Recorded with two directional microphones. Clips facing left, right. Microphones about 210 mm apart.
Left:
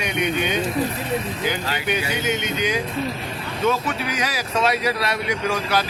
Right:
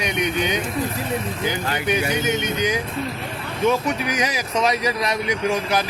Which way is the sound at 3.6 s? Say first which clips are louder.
Right 2 dB; 20° right (ahead or behind).